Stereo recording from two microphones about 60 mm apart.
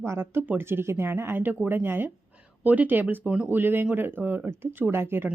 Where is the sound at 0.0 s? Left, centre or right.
Right.